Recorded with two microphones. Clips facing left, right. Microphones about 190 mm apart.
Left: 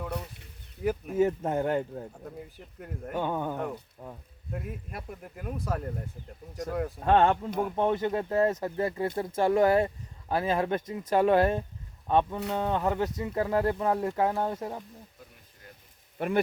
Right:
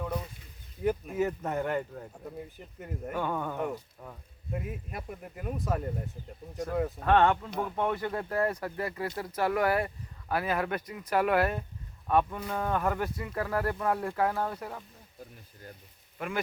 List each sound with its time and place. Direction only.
0.8 s speech: centre (ahead or behind)
1.1 s speech: 25° left (ahead or behind)
2.2 s speech: centre (ahead or behind)
3.2 s speech: 20° left (ahead or behind)
4.5 s speech: 5° right (ahead or behind)
7.0 s speech: 30° left (ahead or behind)
16.1 s speech: 35° left (ahead or behind)